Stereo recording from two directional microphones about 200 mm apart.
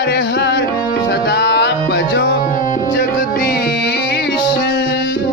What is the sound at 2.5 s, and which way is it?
Music, 45° left (ahead or behind).